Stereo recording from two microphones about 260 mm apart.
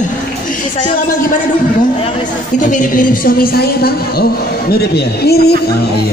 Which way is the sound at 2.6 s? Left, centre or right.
Left.